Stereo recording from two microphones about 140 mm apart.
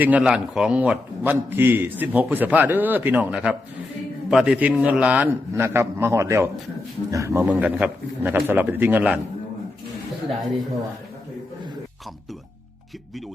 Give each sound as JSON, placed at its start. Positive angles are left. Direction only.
{"t": 0.0, "sound": "a man's voice", "side_deg": -5}
{"t": 7.4, "sound": "a man's voice", "side_deg": -10}